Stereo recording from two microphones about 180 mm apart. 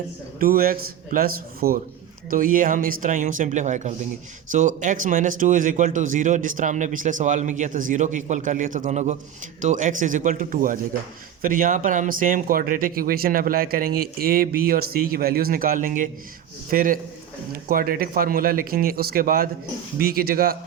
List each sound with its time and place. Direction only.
0.3 s a man's voice: 55° right (ahead or behind)